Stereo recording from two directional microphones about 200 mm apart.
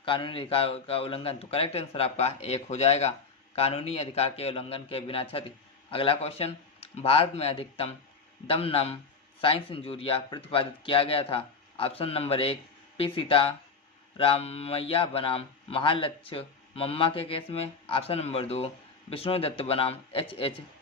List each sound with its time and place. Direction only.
0.0 s a man's voice: 25° left (ahead or behind)